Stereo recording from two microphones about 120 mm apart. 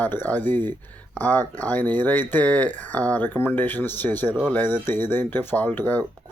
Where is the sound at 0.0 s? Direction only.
15° left (ahead or behind).